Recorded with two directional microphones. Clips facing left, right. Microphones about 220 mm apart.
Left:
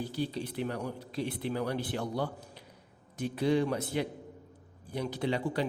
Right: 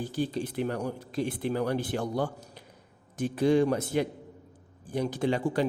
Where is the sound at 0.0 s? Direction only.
45° right (ahead or behind).